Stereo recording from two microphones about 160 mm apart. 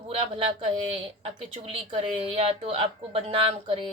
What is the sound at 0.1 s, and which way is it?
Speech, 35° right (ahead or behind).